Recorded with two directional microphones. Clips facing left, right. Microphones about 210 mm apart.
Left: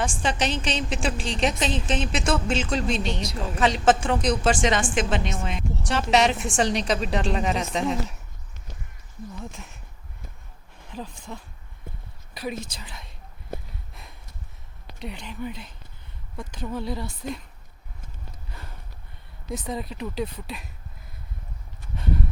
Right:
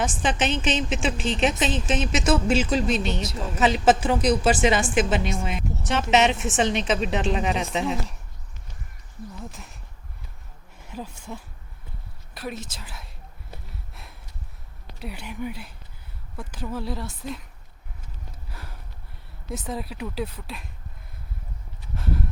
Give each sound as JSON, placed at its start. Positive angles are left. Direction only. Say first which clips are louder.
{"t": 0.0, "sound": "speech", "louder": "right 1 dB", "side_deg": -5}
{"t": 9.4, "sound": "speech", "louder": "left 1 dB", "side_deg": 0}
{"t": 10.8, "sound": "speech", "louder": "even", "side_deg": -10}
{"t": 13.9, "sound": "a sound", "louder": "even", "side_deg": -5}
{"t": 14.9, "sound": "speech", "louder": "right 1 dB", "side_deg": -5}
{"t": 18.4, "sound": "a sound", "louder": "right 1 dB", "side_deg": -5}
{"t": 19.5, "sound": "speech", "louder": "left 1 dB", "side_deg": 0}
{"t": 21.9, "sound": "speech", "louder": "left 1 dB", "side_deg": 0}